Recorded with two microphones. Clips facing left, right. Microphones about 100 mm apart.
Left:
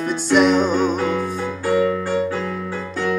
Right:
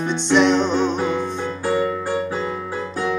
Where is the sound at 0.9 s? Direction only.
20° right (ahead or behind).